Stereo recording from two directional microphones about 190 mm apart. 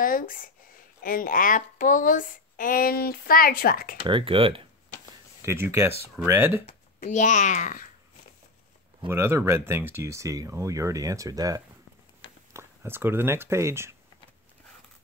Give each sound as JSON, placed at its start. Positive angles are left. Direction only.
{"t": 0.0, "sound": "speech", "side_deg": 45}
{"t": 4.0, "sound": "speech", "side_deg": -25}
{"t": 5.4, "sound": "speech", "side_deg": -15}
{"t": 6.6, "sound": "speech", "side_deg": 40}
{"t": 9.0, "sound": "speech", "side_deg": -15}